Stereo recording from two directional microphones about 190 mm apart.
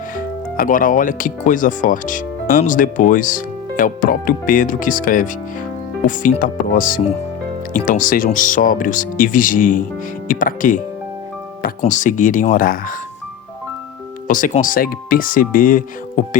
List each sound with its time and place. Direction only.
0.2 s speech: 45° left (ahead or behind)
14.3 s speech: 45° left (ahead or behind)